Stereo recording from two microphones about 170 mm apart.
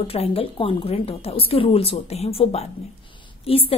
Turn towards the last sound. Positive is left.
turn(degrees=35)  # may be behind; listen again after turning